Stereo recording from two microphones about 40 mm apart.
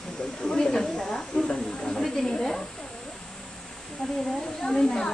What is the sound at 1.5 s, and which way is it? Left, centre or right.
Speech, left.